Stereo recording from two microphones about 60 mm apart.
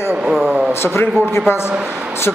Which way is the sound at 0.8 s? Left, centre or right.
Left.